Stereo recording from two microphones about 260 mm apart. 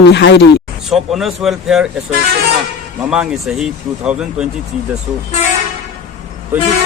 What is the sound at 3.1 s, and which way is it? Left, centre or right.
Speech, centre.